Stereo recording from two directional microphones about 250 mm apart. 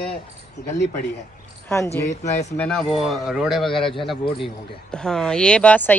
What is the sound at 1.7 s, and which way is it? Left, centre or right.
Speech, centre.